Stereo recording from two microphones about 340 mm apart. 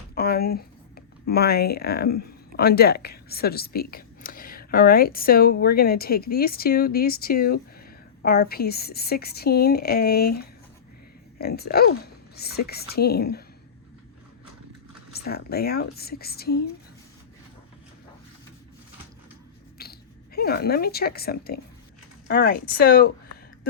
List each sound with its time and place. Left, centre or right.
0.1 s a woman's voice: left
15.1 s a woman's voice: left
19.8 s a woman's voice: left